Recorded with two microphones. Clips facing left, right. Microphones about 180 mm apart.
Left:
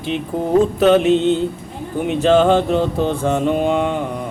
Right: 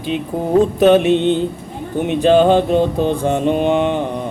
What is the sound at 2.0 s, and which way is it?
Mantra, 20° right (ahead or behind).